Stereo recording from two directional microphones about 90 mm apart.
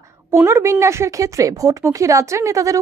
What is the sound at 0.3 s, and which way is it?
A woman's voice, 30° right (ahead or behind).